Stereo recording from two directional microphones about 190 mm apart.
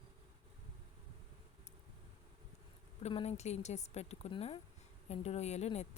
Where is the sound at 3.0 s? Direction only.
35° left (ahead or behind).